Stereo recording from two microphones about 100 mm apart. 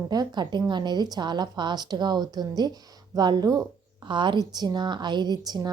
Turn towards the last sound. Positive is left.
turn(degrees=-40)  # may be behind; listen again after turning